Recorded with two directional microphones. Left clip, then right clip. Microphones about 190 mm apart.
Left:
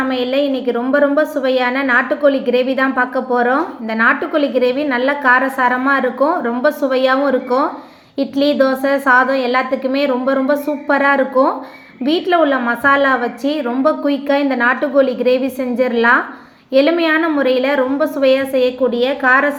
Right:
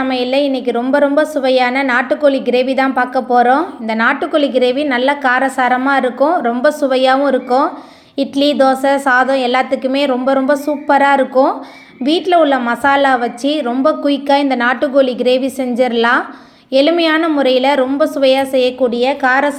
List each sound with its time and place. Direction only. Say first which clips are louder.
0.0 s a woman's voice: right 2 dB; 20° right (ahead or behind)